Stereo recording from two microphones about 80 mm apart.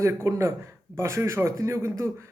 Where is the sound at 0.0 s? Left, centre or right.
Right.